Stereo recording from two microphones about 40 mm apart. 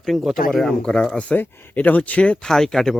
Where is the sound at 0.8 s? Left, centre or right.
Left.